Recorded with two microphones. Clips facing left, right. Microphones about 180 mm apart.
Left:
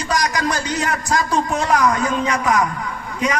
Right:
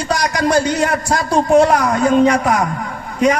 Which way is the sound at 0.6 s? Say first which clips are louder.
Right 5 dB; 55° right (ahead or behind).